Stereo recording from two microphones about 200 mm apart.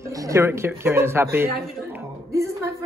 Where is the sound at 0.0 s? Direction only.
15° right (ahead or behind).